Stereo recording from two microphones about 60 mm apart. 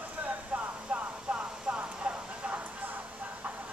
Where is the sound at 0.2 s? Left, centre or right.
Right.